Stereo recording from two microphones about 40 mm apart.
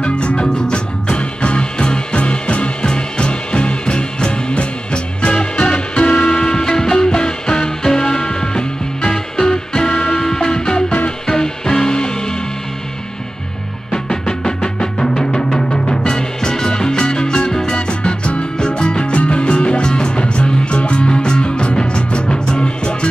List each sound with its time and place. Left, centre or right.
0.0 s music: left
6.3 s music: centre
13.9 s music: centre